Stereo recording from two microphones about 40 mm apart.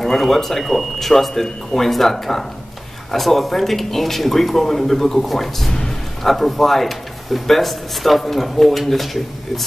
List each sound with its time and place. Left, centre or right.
0.0 s speech: centre
5.7 s music: centre
6.2 s speech: centre